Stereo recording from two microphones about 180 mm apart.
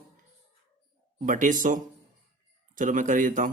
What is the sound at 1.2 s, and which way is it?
Speech, 45° right (ahead or behind).